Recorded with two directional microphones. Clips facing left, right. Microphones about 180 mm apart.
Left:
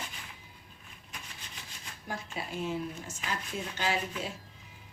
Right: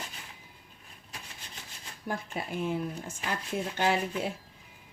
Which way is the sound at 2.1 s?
55° right (ahead or behind).